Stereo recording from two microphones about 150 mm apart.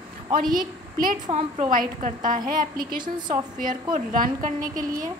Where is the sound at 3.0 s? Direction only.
30° right (ahead or behind).